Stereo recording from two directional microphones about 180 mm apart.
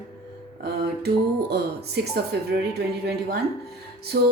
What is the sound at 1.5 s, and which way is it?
A woman's voice, 65° right (ahead or behind).